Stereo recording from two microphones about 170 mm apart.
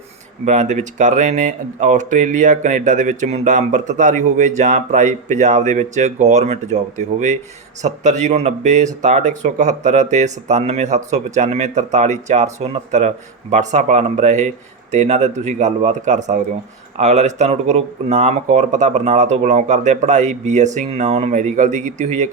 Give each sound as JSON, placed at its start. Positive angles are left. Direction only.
{"t": 0.4, "sound": "speech", "side_deg": -45}